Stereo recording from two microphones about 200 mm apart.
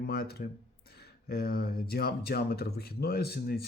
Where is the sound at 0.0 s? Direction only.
50° left (ahead or behind).